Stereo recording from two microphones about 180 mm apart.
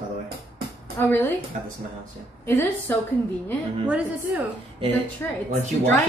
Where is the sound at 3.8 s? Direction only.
5° right (ahead or behind).